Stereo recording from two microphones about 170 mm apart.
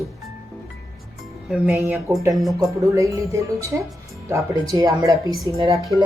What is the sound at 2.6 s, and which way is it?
Speech, 20° right (ahead or behind).